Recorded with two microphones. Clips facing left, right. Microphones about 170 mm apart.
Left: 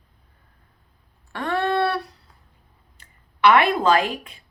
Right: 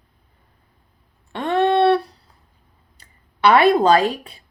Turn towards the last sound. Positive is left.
turn(degrees=-35)  # may be behind; listen again after turning